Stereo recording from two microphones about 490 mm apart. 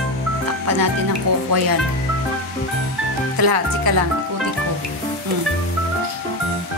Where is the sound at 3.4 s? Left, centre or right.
Right.